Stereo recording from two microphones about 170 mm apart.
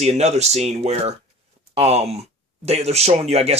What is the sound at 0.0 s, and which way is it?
Speech, 40° right (ahead or behind).